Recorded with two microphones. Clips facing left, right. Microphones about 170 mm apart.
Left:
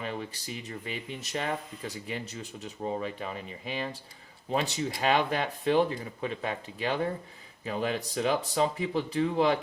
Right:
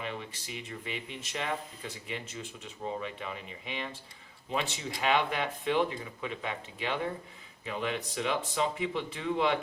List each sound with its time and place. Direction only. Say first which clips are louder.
0.0 s speech: left 3 dB; 40° left (ahead or behind)